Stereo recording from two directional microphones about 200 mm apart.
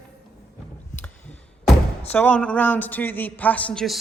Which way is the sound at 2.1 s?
5° left (ahead or behind).